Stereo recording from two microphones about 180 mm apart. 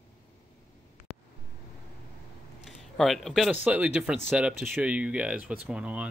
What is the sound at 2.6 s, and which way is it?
Speech, centre (ahead or behind).